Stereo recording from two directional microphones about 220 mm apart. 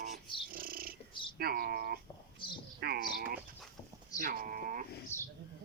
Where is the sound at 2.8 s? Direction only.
45° right (ahead or behind).